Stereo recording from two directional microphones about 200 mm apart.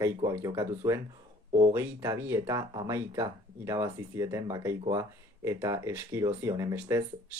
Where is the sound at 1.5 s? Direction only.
25° right (ahead or behind).